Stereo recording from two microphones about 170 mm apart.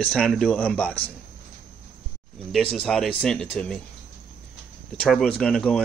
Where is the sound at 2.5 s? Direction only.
5° left (ahead or behind).